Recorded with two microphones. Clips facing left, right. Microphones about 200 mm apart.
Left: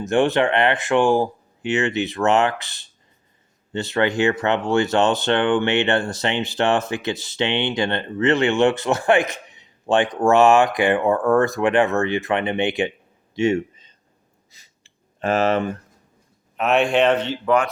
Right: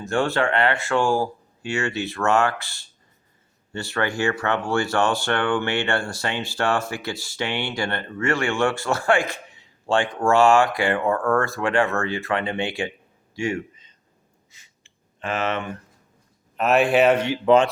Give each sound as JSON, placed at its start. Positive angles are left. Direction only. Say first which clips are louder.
{"t": 0.0, "sound": "speech", "louder": "left 4 dB", "side_deg": 20}
{"t": 13.3, "sound": "a sound", "louder": "left 7 dB", "side_deg": 25}
{"t": 16.6, "sound": "speech", "louder": "even", "side_deg": 0}